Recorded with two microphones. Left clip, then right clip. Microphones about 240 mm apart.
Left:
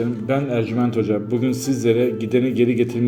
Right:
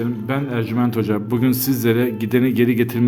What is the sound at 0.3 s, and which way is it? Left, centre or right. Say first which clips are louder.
A man's voice: left 4 dB; centre.